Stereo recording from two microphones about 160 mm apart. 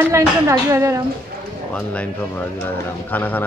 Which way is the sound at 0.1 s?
20° right (ahead or behind).